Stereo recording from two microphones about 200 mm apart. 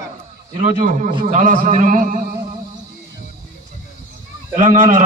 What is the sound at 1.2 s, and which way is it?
A man's voice, 40° right (ahead or behind).